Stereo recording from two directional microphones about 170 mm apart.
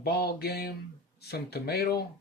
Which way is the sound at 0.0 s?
70° left (ahead or behind).